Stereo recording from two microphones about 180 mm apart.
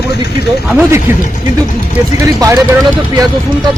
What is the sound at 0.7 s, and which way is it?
Speech, 10° right (ahead or behind).